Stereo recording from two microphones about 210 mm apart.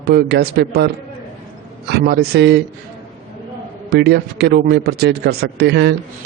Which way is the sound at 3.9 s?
50° right (ahead or behind).